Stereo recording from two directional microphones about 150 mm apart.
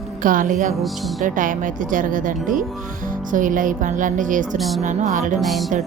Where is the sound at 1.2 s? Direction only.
60° right (ahead or behind).